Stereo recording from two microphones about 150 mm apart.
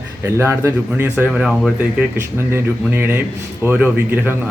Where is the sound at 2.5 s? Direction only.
15° right (ahead or behind).